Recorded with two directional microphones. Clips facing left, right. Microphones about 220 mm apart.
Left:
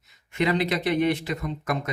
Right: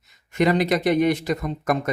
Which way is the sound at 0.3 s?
45° right (ahead or behind).